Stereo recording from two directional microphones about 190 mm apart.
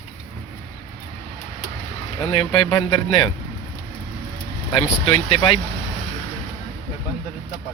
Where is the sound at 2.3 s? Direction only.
25° left (ahead or behind).